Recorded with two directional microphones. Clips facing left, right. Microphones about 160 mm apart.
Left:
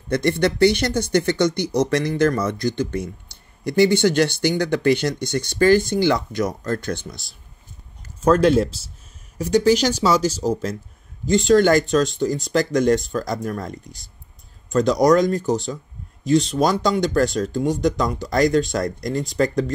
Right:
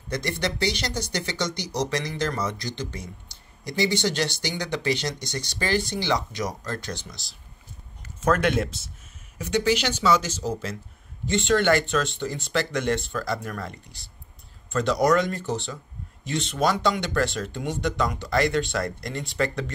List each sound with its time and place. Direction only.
0.1 s speech: 55° left (ahead or behind)
8.2 s speech: 35° left (ahead or behind)